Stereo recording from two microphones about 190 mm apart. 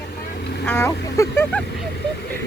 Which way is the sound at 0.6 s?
10° left (ahead or behind).